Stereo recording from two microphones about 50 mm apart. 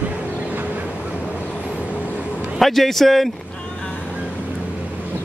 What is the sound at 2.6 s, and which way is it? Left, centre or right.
Speech, centre.